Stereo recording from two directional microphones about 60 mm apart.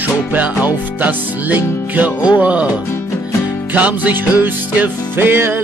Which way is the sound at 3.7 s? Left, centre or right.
Right.